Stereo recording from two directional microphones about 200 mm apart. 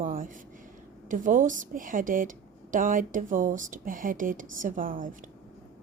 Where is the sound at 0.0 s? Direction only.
45° right (ahead or behind).